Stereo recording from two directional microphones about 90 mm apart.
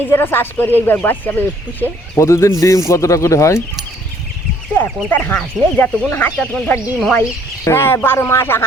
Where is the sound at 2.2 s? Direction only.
30° left (ahead or behind).